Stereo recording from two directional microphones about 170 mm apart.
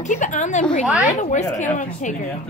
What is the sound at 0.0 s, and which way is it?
Speech, 45° left (ahead or behind).